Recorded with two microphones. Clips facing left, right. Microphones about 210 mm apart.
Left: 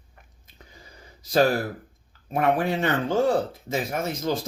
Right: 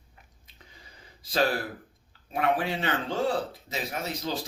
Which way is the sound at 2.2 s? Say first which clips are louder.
Left 4 dB; 50° left (ahead or behind).